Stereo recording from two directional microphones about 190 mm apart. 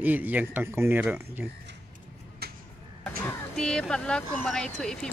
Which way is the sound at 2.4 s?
55° right (ahead or behind).